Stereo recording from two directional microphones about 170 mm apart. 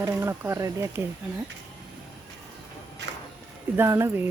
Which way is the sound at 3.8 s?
15° right (ahead or behind).